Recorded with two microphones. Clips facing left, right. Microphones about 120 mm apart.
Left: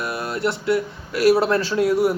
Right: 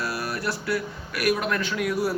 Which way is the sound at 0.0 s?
25° left (ahead or behind).